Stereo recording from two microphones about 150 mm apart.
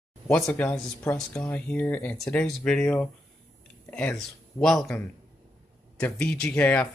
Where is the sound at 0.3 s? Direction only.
5° left (ahead or behind).